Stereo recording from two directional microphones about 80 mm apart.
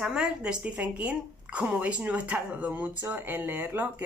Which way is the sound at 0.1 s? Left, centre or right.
Centre.